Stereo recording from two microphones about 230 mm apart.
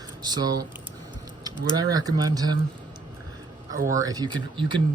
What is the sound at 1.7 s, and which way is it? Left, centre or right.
Speech, centre.